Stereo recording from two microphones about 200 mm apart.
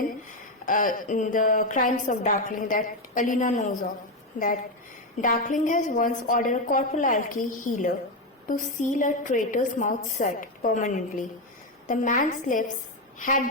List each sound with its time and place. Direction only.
0.6 s a woman's voice: 40° left (ahead or behind)
5.2 s a woman's voice: 40° left (ahead or behind)